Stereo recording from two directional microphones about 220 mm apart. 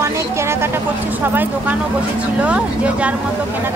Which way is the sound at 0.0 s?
10° right (ahead or behind).